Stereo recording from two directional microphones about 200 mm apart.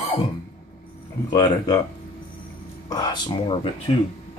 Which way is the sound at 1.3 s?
20° left (ahead or behind).